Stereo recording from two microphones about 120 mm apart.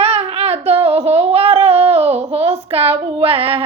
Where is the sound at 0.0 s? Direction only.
55° right (ahead or behind).